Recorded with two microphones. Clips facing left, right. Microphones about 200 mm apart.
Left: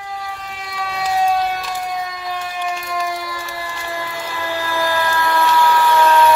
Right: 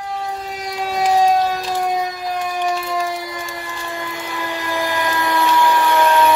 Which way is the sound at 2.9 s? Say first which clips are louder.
Right 1 dB; 25° right (ahead or behind).